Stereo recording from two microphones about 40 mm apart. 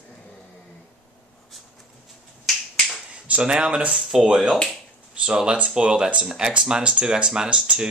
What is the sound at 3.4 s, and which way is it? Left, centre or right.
Speech, right.